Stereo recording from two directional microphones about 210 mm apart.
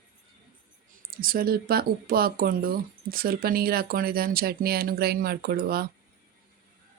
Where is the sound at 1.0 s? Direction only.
45° right (ahead or behind).